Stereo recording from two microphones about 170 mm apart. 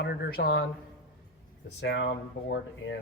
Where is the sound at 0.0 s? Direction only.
70° left (ahead or behind).